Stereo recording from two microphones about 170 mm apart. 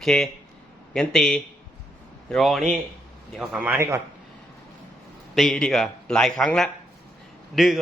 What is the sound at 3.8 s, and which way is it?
Speech, 15° right (ahead or behind).